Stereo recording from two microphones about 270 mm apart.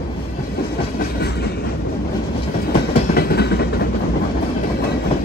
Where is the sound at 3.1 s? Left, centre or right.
Left.